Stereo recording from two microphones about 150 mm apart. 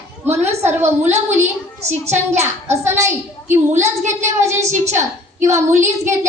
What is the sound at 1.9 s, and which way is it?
Speech, 50° right (ahead or behind).